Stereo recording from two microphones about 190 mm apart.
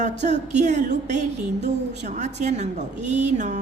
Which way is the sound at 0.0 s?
40° right (ahead or behind).